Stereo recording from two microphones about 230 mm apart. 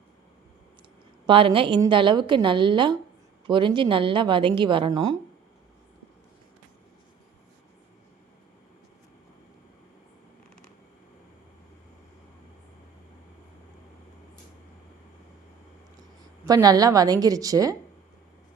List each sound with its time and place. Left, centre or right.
1.3 s a woman's voice: right
16.5 s a woman's voice: centre